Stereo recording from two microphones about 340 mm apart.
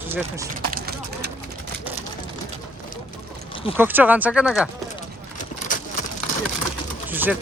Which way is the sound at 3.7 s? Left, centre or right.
Centre.